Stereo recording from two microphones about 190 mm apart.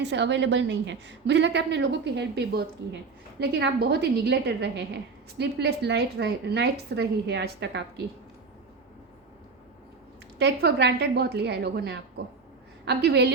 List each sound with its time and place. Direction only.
0.0 s a woman's voice: 65° right (ahead or behind)
10.3 s a woman's voice: 60° right (ahead or behind)